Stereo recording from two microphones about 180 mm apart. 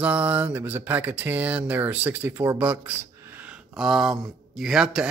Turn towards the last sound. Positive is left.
turn(degrees=-5)  # may be behind; listen again after turning